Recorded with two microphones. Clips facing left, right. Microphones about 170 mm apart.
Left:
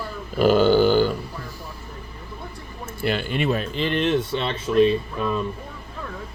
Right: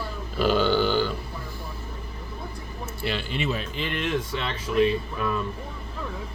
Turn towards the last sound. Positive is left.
turn(degrees=25)  # may be behind; listen again after turning